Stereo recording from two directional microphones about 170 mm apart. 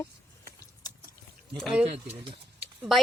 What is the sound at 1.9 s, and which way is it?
Speech, 35° right (ahead or behind).